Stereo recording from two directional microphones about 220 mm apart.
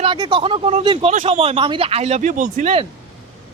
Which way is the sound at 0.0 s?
20° right (ahead or behind).